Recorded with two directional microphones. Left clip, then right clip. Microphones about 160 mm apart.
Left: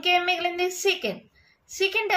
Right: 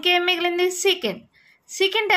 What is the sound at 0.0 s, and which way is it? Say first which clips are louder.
A child's voice: right 3 dB; 45° right (ahead or behind).